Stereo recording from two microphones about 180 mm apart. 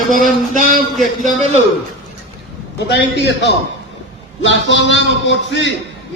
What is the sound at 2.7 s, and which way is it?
Speech, 70° left (ahead or behind).